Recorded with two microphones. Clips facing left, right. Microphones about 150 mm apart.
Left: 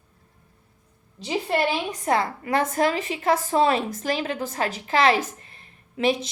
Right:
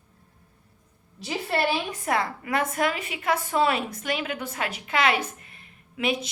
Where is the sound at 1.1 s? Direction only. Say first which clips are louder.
Left 3 dB; 20° left (ahead or behind).